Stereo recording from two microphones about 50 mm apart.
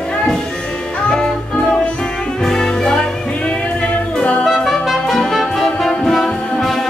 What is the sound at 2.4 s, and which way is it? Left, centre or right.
Music, centre.